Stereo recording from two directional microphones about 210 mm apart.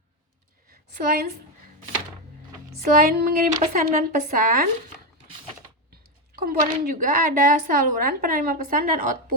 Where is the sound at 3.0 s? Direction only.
40° right (ahead or behind).